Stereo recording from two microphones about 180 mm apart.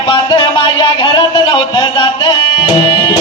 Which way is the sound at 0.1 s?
30° left (ahead or behind).